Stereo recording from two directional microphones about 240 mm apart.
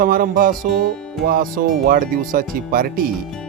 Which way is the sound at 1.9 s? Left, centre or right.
Right.